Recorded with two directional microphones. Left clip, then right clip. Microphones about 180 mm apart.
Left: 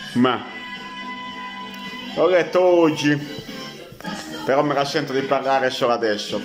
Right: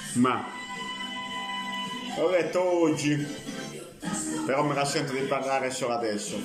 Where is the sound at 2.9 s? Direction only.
40° left (ahead or behind).